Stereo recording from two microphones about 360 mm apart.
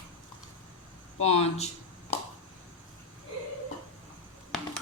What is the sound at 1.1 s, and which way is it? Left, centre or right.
Speech, centre.